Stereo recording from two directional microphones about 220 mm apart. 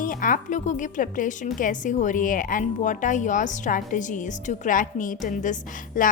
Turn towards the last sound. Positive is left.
turn(degrees=40)  # may be behind; listen again after turning